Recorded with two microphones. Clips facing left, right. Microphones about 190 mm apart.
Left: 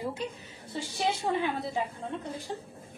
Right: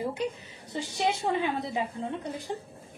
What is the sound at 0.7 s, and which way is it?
A woman's voice, 15° right (ahead or behind).